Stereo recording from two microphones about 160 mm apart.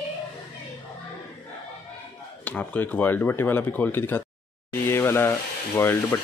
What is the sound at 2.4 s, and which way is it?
Speech, 10° left (ahead or behind).